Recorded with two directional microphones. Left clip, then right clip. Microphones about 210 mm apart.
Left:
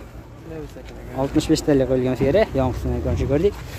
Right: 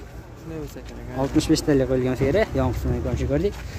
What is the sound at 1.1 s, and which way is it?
Speech, 5° left (ahead or behind).